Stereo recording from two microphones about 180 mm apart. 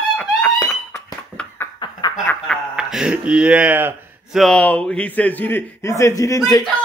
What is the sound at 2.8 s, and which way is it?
Speech, 5° right (ahead or behind).